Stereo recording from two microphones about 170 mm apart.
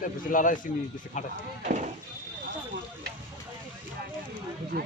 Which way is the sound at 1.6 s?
45° right (ahead or behind).